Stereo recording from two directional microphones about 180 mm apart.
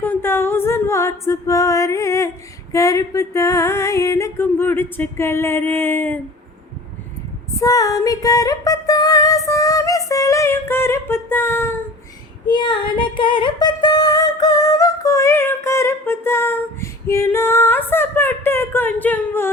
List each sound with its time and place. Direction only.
0.0 s a capella: 10° left (ahead or behind)
2.7 s female singing: 15° left (ahead or behind)
7.6 s music: 20° left (ahead or behind)
12.5 s female singing: 25° left (ahead or behind)